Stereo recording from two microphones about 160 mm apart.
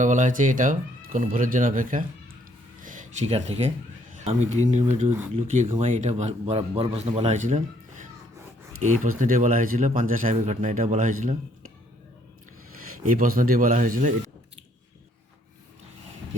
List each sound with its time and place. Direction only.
0.0 s speech: 55° right (ahead or behind)
8.8 s speech: 55° right (ahead or behind)
13.0 s speech: 60° right (ahead or behind)